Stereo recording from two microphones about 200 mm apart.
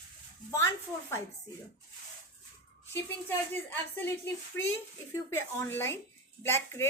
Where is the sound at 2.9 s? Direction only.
10° left (ahead or behind).